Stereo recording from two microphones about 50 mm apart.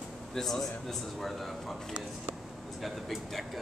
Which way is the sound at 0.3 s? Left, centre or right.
Centre.